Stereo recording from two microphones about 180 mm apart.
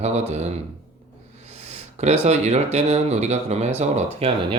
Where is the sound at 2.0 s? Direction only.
35° right (ahead or behind).